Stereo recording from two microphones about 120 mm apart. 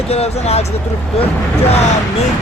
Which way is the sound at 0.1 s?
60° left (ahead or behind).